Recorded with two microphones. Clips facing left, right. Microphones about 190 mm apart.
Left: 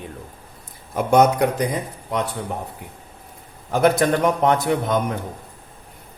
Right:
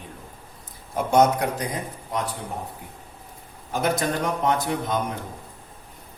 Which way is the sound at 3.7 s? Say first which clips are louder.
Left 7 dB; 60° left (ahead or behind).